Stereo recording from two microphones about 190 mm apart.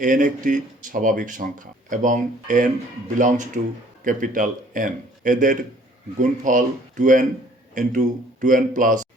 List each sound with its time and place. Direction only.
0.0 s speech: 45° right (ahead or behind)